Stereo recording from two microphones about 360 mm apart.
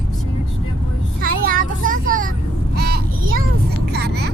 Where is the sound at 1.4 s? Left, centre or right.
Right.